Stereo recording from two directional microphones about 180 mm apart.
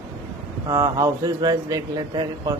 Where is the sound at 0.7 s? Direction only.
20° right (ahead or behind).